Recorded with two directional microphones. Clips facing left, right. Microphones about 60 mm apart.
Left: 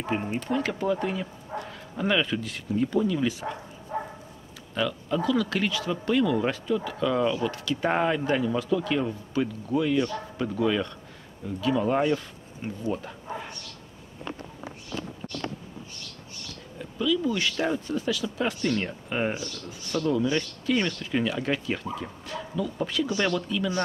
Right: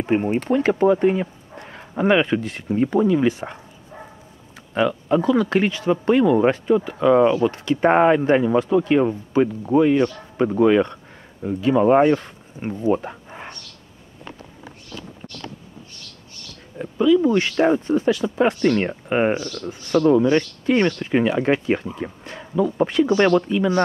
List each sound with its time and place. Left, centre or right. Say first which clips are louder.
0.0 s speech: right 9 dB; right
4.7 s speech: right 8 dB; right
16.7 s speech: right 10 dB; right
19.3 s speech: right 8 dB; right
19.6 s speech: right 11 dB; right